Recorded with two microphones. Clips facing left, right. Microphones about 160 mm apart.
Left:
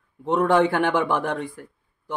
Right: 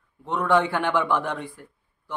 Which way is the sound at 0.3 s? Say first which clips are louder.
Left 3 dB; 45° left (ahead or behind).